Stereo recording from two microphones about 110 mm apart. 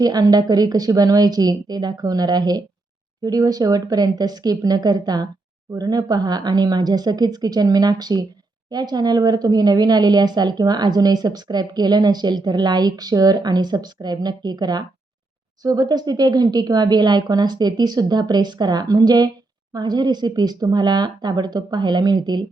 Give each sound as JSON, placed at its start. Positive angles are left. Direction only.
{"t": 0.0, "sound": "a woman's voice", "side_deg": -35}